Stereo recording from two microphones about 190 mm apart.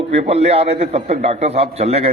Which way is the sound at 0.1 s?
35° right (ahead or behind).